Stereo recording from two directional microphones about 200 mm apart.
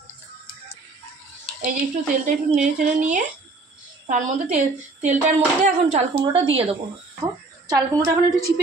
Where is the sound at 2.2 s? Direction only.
40° right (ahead or behind).